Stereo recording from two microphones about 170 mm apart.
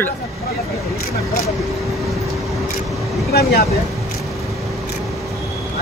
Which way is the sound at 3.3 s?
65° left (ahead or behind).